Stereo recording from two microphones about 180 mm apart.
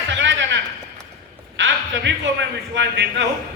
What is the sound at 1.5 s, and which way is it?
A man's voice, 90° right.